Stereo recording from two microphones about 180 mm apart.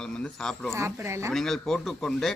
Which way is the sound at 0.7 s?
15° right (ahead or behind).